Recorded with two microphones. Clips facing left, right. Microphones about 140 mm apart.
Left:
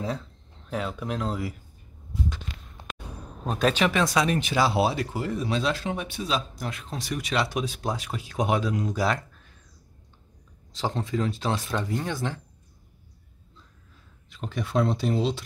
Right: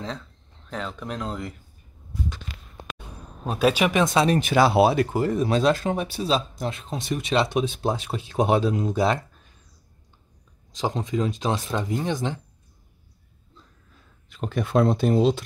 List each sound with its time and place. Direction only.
0.7 s speech: 5° left (ahead or behind)
3.4 s speech: 10° right (ahead or behind); by 4.4 s 25° right (ahead or behind)
4.4 s speech: 55° right (ahead or behind); by 9.2 s 25° right (ahead or behind)
10.7 s speech: 15° right (ahead or behind)
14.3 s speech: 50° right (ahead or behind)